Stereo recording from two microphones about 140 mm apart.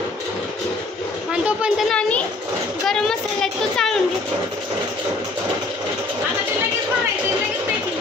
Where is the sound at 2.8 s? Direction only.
5° left (ahead or behind).